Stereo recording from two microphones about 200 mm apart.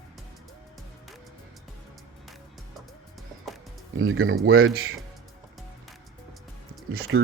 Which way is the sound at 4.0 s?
90° right.